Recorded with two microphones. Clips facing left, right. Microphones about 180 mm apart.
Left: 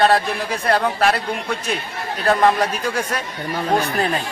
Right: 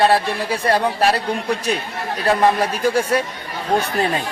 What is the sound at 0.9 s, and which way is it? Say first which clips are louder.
Speech: right 1 dB; 35° right (ahead or behind).